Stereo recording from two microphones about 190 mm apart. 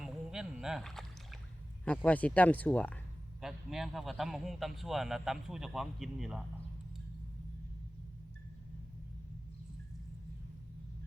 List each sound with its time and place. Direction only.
0.0 s rowboat: 5° right (ahead or behind)
2.0 s a man's voice: 10° left (ahead or behind)